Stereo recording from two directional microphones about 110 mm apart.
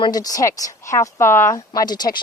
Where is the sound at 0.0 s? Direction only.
35° left (ahead or behind).